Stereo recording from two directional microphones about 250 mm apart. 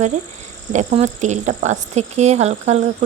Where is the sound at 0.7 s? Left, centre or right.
Right.